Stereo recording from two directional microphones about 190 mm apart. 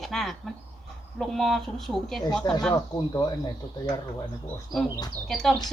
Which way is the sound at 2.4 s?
20° left (ahead or behind).